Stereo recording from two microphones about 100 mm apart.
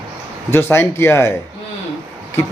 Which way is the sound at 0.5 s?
25° left (ahead or behind).